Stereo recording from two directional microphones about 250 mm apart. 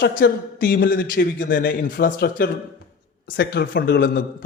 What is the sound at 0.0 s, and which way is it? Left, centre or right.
A man's voice, left.